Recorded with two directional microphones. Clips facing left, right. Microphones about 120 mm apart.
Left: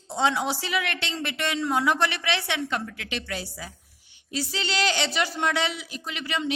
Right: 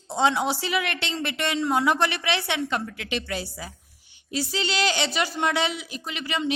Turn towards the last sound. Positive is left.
turn(degrees=-15)  # may be behind; listen again after turning